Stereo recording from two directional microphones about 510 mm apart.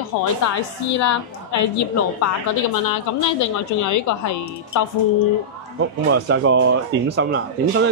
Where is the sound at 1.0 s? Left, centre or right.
Left.